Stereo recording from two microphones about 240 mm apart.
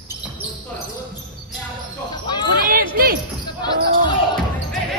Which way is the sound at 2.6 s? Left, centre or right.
Right.